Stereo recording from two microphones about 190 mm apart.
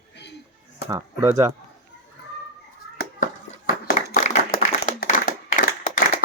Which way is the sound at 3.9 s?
55° left (ahead or behind).